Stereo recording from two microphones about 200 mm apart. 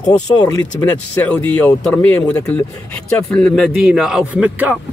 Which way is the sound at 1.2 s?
5° left (ahead or behind).